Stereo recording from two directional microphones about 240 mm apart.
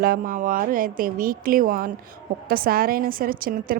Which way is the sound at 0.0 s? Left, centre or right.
Right.